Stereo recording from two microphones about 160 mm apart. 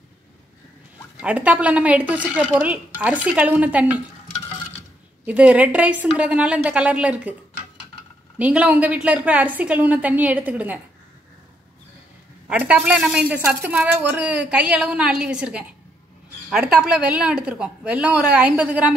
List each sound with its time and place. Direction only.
1.2 s a woman's voice: 10° right (ahead or behind)
5.2 s a woman's voice: 10° right (ahead or behind)
8.4 s a woman's voice: 5° right (ahead or behind)
12.4 s a woman's voice: 5° right (ahead or behind)